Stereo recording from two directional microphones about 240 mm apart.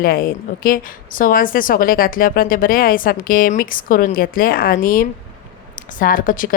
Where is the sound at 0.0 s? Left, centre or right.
Left.